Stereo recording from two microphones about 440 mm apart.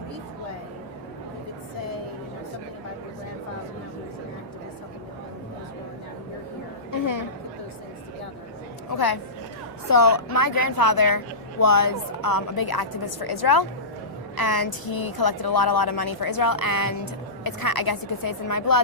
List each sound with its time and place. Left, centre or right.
7.0 s chatter: left
9.9 s a woman's voice: left